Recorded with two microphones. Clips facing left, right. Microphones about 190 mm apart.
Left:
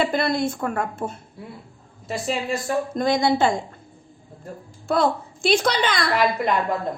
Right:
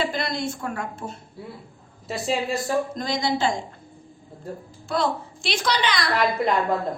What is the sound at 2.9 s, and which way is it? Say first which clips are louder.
Speech: left 5 dB; 55° left (ahead or behind).